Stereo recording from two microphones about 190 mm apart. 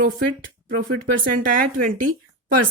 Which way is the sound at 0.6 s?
80° right.